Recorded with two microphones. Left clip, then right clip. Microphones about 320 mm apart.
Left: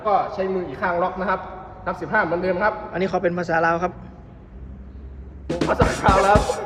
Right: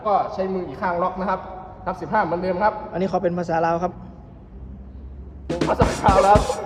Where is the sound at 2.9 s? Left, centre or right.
Centre.